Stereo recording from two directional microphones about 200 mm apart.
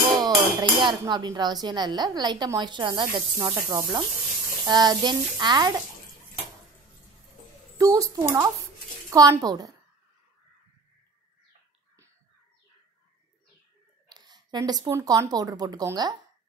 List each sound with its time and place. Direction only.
0.2 s speech: 20° right (ahead or behind)
4.6 s speech: 20° right (ahead or behind)
7.7 s a woman's voice: 15° right (ahead or behind)
14.0 s speech: 20° right (ahead or behind)